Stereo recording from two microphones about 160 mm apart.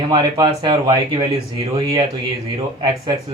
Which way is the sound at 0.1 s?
25° right (ahead or behind).